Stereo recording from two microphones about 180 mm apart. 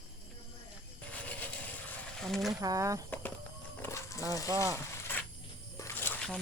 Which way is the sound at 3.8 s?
15° left (ahead or behind).